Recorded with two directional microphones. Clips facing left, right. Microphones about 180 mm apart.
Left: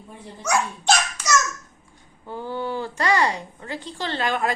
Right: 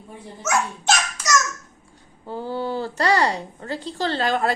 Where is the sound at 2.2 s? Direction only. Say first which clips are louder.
Right 2 dB; 40° right (ahead or behind).